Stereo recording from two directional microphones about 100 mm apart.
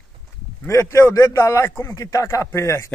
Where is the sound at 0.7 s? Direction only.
30° left (ahead or behind).